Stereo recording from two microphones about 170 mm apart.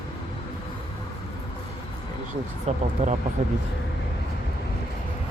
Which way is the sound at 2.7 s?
40° right (ahead or behind).